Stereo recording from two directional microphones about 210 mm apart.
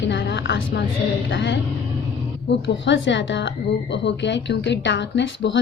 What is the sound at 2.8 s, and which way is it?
A woman's voice, 60° left (ahead or behind).